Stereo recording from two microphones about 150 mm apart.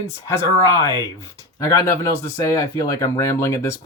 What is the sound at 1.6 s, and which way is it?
Speech, 25° left (ahead or behind).